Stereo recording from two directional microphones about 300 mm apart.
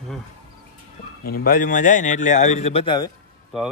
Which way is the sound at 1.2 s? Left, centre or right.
Left.